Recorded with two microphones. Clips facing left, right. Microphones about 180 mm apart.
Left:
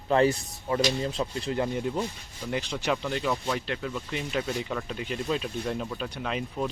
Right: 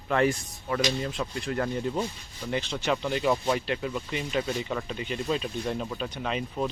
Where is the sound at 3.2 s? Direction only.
20° right (ahead or behind).